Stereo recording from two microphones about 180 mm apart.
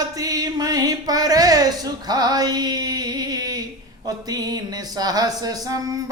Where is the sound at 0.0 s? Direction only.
20° right (ahead or behind).